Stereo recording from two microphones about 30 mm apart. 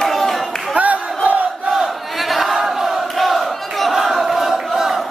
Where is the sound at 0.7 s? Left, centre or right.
Right.